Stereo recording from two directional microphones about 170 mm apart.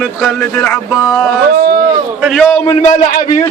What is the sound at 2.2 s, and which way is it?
Speech, centre (ahead or behind).